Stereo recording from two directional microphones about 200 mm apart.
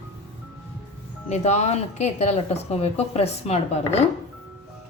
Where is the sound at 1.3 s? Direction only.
35° left (ahead or behind).